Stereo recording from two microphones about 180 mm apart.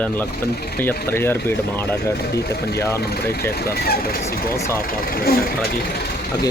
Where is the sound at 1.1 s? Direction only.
10° left (ahead or behind).